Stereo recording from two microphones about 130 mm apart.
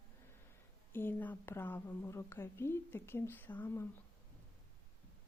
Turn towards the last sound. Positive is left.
turn(degrees=15)  # may be behind; listen again after turning